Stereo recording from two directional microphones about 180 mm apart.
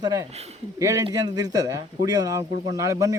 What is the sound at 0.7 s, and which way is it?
A man's voice, 15° right (ahead or behind).